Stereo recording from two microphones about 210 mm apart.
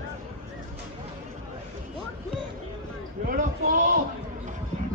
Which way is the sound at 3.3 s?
40° right (ahead or behind).